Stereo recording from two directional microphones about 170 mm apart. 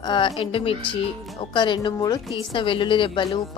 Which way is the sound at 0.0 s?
30° left (ahead or behind).